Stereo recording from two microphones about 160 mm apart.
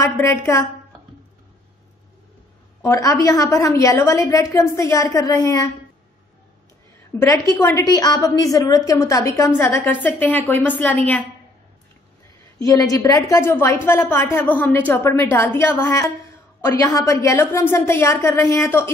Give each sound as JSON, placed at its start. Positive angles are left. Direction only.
{"t": 0.0, "sound": "a woman's voice", "side_deg": 20}
{"t": 2.8, "sound": "a woman's voice", "side_deg": 20}
{"t": 7.2, "sound": "a woman's voice", "side_deg": 20}
{"t": 12.5, "sound": "a woman's voice", "side_deg": 20}